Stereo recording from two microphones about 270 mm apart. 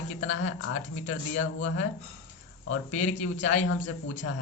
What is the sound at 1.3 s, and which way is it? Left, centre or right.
Speech, left.